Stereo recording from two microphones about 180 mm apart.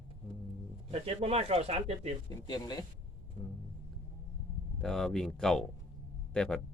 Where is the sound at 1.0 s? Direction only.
35° right (ahead or behind).